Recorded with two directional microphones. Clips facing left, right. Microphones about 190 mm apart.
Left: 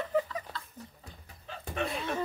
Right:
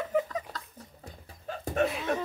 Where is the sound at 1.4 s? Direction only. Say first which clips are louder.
Right 6 dB; 45° right (ahead or behind).